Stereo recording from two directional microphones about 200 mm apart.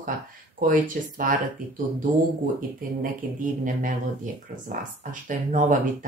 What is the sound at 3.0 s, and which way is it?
Speech, 40° right (ahead or behind).